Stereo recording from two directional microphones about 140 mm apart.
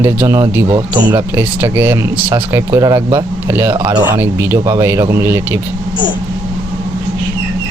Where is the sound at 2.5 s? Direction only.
25° right (ahead or behind).